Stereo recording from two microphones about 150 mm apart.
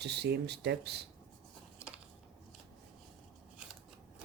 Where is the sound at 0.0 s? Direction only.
90° right.